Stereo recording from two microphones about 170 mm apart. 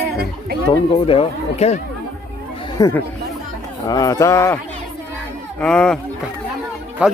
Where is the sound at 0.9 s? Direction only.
30° left (ahead or behind).